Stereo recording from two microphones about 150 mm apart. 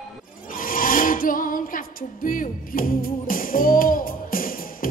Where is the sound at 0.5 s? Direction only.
70° left (ahead or behind).